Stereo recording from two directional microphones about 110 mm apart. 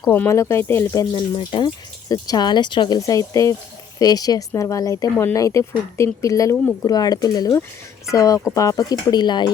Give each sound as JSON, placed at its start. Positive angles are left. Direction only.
{"t": 0.1, "sound": "speech", "side_deg": 20}
{"t": 2.0, "sound": "speech", "side_deg": 35}
{"t": 3.1, "sound": "speech", "side_deg": 30}